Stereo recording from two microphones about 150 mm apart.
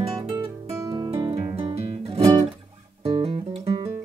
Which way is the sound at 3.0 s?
40° right (ahead or behind).